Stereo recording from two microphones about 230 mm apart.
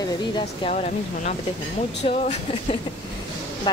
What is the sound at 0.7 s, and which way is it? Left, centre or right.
Speech, left.